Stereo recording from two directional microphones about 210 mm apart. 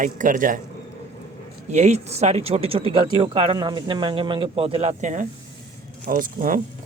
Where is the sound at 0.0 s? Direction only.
40° right (ahead or behind).